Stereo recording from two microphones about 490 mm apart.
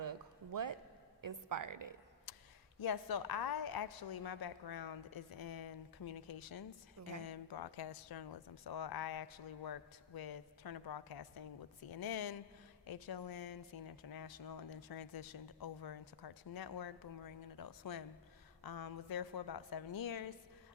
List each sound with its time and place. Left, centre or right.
0.0 s a sound: right
1.2 s a woman's voice: right
2.8 s a woman's voice: left